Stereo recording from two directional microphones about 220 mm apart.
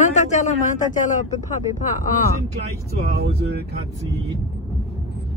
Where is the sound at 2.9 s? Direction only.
50° right (ahead or behind).